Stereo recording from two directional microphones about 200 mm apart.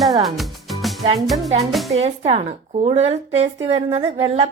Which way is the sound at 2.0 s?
30° right (ahead or behind).